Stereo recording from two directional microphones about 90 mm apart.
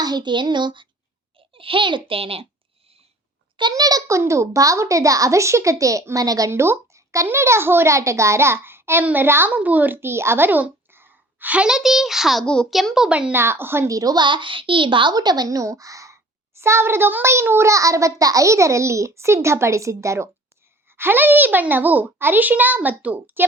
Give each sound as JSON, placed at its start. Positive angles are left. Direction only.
{"t": 0.0, "sound": "a sound", "side_deg": -55}
{"t": 1.4, "sound": "a child's voice", "side_deg": -80}
{"t": 3.6, "sound": "a child's voice", "side_deg": -45}
{"t": 6.5, "sound": "a child's voice", "side_deg": -30}
{"t": 13.3, "sound": "a child's voice", "side_deg": -25}
{"t": 13.8, "sound": "a child's voice", "side_deg": -40}
{"t": 14.2, "sound": "a child's voice", "side_deg": -65}